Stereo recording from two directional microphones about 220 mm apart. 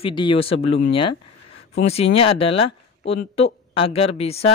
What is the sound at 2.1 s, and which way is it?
Speech, 25° left (ahead or behind).